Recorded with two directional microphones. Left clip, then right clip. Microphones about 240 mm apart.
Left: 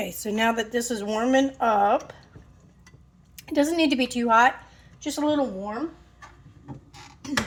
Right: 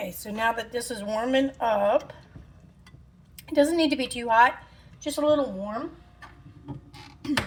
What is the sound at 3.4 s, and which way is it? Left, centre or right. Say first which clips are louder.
Speech: right 1 dB; left.